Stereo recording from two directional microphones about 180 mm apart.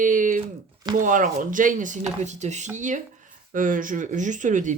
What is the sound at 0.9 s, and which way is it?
Speech, 45° right (ahead or behind).